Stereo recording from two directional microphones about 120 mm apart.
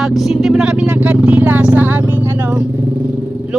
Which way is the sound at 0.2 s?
Centre (ahead or behind).